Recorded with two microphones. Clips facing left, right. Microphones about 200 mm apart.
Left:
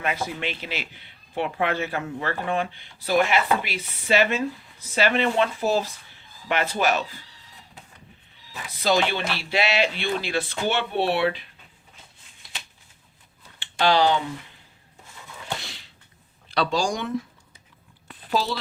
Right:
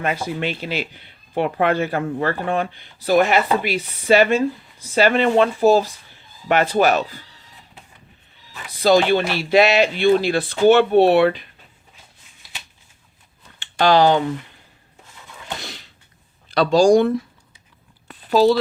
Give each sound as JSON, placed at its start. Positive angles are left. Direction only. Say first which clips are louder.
{"t": 0.3, "sound": "speech", "louder": "right 7 dB", "side_deg": -35}
{"t": 8.8, "sound": "speech", "louder": "right 8 dB", "side_deg": -35}
{"t": 13.6, "sound": "speech", "louder": "right 5 dB", "side_deg": -45}
{"t": 16.5, "sound": "speech", "louder": "right 11 dB", "side_deg": -40}
{"t": 18.3, "sound": "speech", "louder": "right 11 dB", "side_deg": -45}